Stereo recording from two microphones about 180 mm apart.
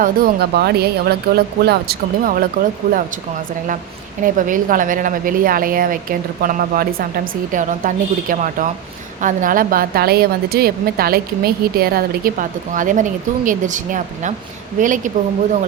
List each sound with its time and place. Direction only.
0.0 s speech: 55° right (ahead or behind)
4.4 s a woman's voice: 50° right (ahead or behind)